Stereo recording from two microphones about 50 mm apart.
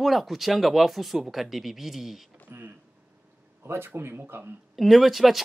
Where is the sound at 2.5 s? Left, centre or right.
Right.